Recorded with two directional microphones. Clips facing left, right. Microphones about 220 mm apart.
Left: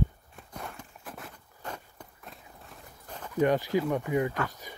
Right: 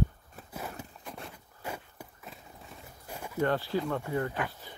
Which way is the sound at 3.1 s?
10° right (ahead or behind).